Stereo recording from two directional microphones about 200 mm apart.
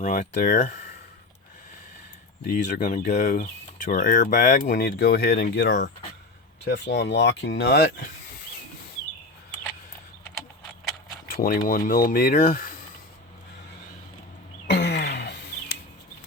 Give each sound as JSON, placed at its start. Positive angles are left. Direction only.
{"t": 0.0, "sound": "speech", "side_deg": 40}
{"t": 2.6, "sound": "speech", "side_deg": 40}
{"t": 4.7, "sound": "speech", "side_deg": 50}
{"t": 11.3, "sound": "speech", "side_deg": 45}
{"t": 14.7, "sound": "a sound", "side_deg": 55}